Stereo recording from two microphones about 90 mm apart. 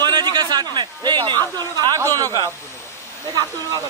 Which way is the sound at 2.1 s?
45° right (ahead or behind).